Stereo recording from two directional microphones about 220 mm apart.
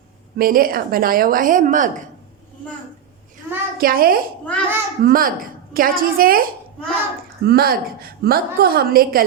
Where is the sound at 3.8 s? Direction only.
40° right (ahead or behind).